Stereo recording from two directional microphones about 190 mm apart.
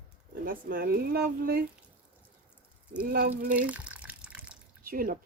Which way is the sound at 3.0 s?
50° right (ahead or behind).